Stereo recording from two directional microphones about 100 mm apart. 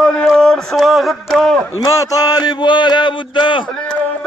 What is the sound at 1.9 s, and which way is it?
Speech, 35° left (ahead or behind).